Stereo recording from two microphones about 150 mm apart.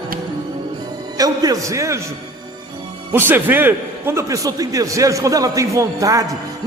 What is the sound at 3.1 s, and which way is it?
A man's voice, 15° right (ahead or behind).